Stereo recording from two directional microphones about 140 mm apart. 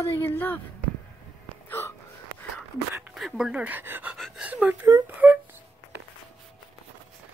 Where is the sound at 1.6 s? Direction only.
15° left (ahead or behind).